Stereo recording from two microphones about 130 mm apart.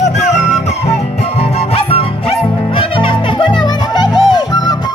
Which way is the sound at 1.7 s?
50° left (ahead or behind).